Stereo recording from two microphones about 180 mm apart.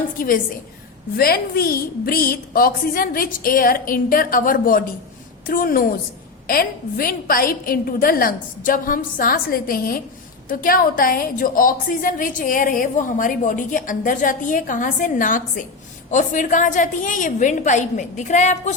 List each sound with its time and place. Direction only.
1.1 s a woman's voice: 55° left (ahead or behind)